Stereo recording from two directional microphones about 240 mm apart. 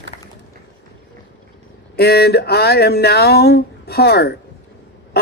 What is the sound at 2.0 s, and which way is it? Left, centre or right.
Speech, left.